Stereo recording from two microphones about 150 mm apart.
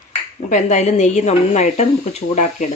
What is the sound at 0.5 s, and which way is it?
Speech, 50° left (ahead or behind).